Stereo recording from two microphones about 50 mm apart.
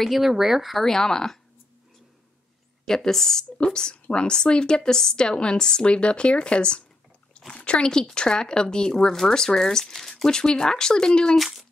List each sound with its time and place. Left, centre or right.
0.0 s speech: centre
2.8 s speech: centre
3.5 s speech: centre
11.3 s speech: centre